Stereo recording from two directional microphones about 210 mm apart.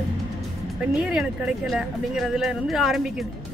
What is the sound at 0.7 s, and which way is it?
Speech, 5° right (ahead or behind).